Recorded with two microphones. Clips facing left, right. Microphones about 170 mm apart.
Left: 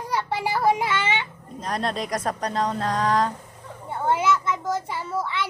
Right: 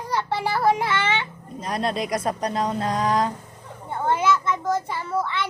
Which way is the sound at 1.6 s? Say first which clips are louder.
Right 2 dB; 5° right (ahead or behind).